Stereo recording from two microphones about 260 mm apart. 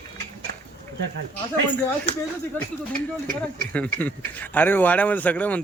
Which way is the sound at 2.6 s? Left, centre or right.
Centre.